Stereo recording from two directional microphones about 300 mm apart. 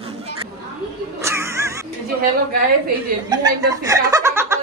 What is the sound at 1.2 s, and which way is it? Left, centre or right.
Music, centre.